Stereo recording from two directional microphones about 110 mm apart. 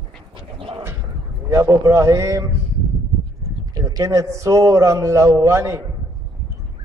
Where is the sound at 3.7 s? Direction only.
35° right (ahead or behind).